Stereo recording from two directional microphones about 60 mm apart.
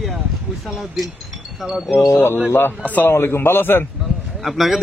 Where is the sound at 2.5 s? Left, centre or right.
Left.